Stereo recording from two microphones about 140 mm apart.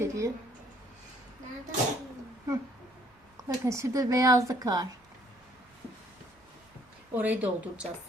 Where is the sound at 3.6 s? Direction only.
20° right (ahead or behind).